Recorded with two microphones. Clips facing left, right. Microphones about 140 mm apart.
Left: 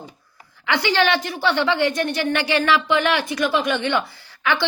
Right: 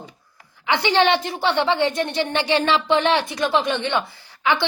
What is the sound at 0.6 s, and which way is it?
A woman's voice, 20° right (ahead or behind).